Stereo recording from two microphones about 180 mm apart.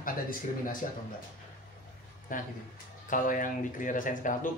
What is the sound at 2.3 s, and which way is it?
A man's voice, 50° left (ahead or behind).